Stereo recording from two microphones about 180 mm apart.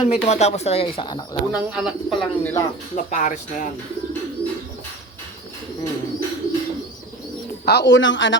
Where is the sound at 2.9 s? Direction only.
45° left (ahead or behind).